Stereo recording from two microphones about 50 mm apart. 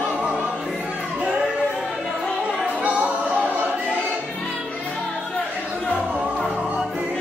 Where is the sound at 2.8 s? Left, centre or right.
Right.